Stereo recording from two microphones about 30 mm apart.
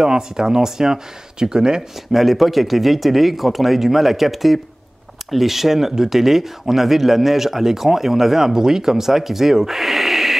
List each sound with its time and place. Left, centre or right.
0.0 s speech: right
2.1 s speech: centre